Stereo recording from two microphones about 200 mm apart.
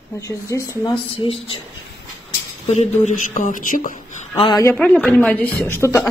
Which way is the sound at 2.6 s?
35° left (ahead or behind).